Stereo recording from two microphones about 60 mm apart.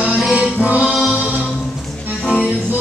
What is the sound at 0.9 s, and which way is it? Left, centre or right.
Music, centre.